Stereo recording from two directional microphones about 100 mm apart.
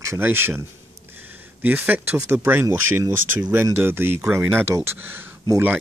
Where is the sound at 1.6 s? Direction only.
15° right (ahead or behind).